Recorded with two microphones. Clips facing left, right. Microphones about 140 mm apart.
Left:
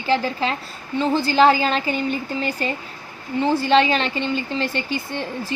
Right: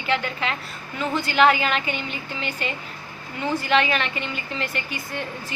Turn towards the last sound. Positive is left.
turn(degrees=30)  # may be behind; listen again after turning